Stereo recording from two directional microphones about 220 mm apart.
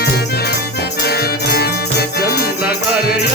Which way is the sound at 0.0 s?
45° left (ahead or behind).